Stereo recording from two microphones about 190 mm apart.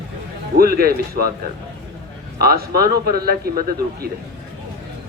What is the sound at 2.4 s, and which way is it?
A man's voice, 55° right (ahead or behind).